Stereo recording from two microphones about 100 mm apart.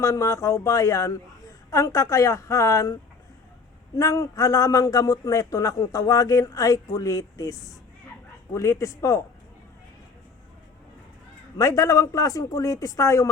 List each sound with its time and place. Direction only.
0.0 s a man's voice: 35° left (ahead or behind)
11.5 s a man's voice: 30° left (ahead or behind)